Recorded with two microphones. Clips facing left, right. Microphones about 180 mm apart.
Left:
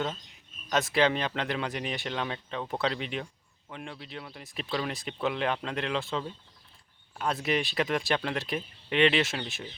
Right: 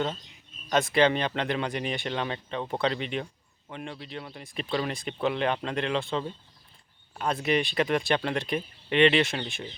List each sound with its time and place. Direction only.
0.7 s speech: centre (ahead or behind)